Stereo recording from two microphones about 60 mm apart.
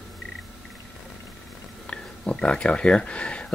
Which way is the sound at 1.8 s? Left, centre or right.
Centre.